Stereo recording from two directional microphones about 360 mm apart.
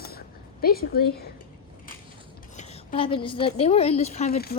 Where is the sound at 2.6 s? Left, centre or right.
Centre.